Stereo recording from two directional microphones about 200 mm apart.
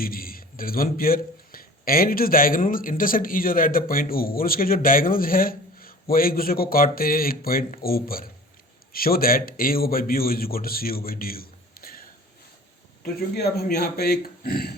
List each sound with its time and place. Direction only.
0.0 s a man's voice: 45° left (ahead or behind)